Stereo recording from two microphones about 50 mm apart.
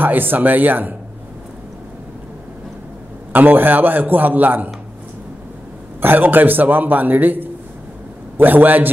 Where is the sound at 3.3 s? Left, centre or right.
Right.